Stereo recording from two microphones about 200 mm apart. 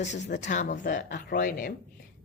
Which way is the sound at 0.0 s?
35° left (ahead or behind).